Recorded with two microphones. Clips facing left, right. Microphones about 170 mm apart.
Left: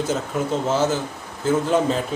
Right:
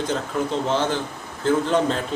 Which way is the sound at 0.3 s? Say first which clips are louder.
Left 1 dB; 5° left (ahead or behind).